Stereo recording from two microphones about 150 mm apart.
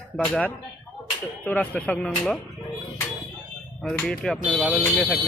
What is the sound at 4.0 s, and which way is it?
Speech, 5° left (ahead or behind).